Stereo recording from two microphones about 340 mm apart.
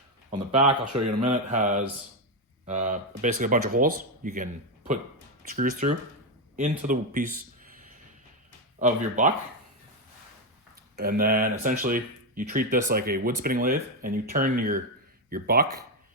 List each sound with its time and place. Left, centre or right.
0.7 s speech: centre
5.5 s speech: right
8.8 s speech: right
10.9 s speech: right